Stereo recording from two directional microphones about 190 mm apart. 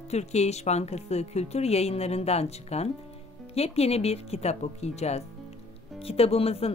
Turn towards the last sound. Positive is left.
turn(degrees=30)  # may be behind; listen again after turning